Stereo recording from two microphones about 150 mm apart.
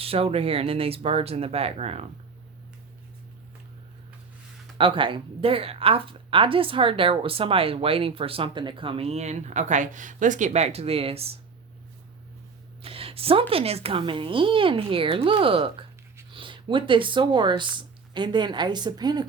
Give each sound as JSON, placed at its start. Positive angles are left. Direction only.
{"t": 0.0, "sound": "speech", "side_deg": -40}
{"t": 4.8, "sound": "speech", "side_deg": -35}
{"t": 12.8, "sound": "a sound", "side_deg": -40}
{"t": 13.5, "sound": "speech", "side_deg": -40}